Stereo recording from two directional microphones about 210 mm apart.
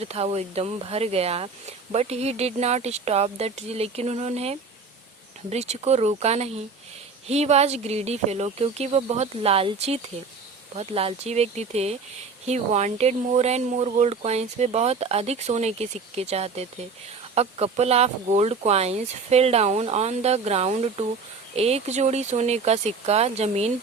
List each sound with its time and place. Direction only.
0.0 s speech: 30° right (ahead or behind)
10.8 s speech: 30° right (ahead or behind)